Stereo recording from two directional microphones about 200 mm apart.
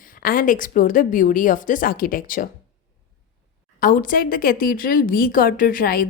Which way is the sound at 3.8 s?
45° left (ahead or behind).